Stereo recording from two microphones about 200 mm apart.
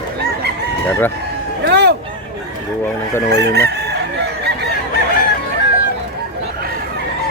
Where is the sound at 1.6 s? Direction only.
55° right (ahead or behind).